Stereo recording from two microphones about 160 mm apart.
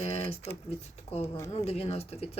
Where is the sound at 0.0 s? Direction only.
40° left (ahead or behind).